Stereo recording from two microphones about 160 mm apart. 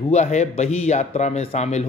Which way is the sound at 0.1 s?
45° left (ahead or behind).